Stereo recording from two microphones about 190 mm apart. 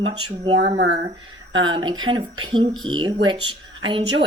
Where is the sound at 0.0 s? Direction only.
25° right (ahead or behind).